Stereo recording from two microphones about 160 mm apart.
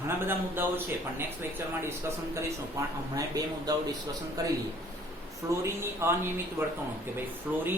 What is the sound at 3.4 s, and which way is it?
Speech, 20° right (ahead or behind).